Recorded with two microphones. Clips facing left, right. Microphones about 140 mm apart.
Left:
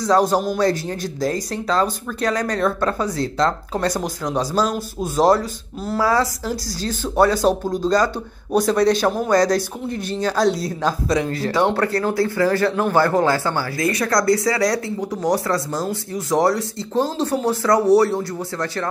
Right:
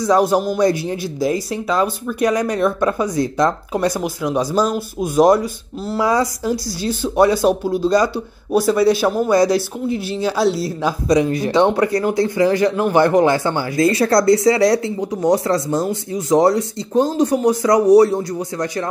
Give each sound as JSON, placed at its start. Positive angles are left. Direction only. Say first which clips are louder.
{"t": 0.0, "sound": "speech", "louder": "right 2 dB", "side_deg": -10}